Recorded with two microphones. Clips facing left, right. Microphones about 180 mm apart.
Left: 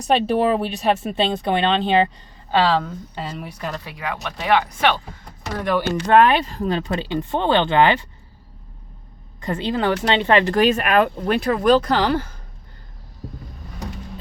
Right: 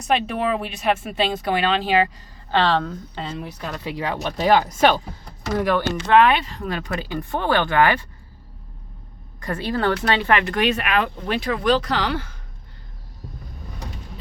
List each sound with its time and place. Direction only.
0.1 s speech: 30° left (ahead or behind)
2.5 s a woman's voice: 10° left (ahead or behind)
3.8 s speech: 30° right (ahead or behind)
6.1 s speech: 40° left (ahead or behind); by 8.0 s 25° left (ahead or behind)
9.4 s speech: 20° left (ahead or behind); by 12.4 s 45° left (ahead or behind)